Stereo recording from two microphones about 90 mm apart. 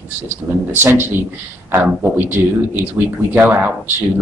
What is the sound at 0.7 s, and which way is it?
A man's voice, 25° right (ahead or behind).